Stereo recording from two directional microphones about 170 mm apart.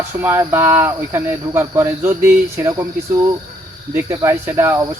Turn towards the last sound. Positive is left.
turn(degrees=-15)  # may be behind; listen again after turning